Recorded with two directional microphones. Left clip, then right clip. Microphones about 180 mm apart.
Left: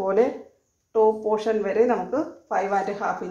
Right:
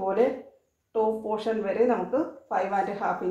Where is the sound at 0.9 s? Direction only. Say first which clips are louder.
Left 6 dB; 40° left (ahead or behind).